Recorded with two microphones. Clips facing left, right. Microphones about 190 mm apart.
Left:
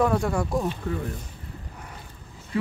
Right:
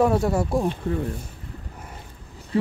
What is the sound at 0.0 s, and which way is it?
Speech, 25° right (ahead or behind).